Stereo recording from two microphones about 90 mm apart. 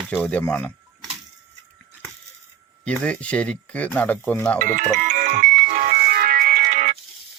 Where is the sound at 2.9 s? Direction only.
10° left (ahead or behind).